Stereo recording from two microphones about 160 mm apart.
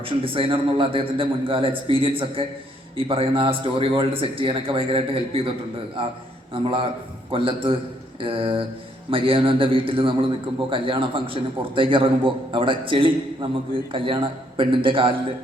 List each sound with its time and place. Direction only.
0.0 s a man's voice: 35° right (ahead or behind)